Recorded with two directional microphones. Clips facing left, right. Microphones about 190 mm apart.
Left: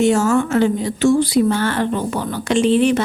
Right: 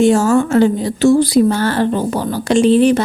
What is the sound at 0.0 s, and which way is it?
Speech, 35° right (ahead or behind).